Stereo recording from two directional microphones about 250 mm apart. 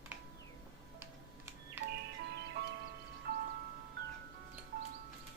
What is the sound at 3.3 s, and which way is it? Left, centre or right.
Music, right.